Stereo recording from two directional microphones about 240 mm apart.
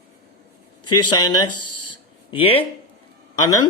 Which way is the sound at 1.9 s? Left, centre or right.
Left.